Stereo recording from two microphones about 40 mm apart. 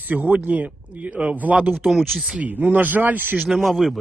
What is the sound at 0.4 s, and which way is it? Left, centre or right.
Speech, right.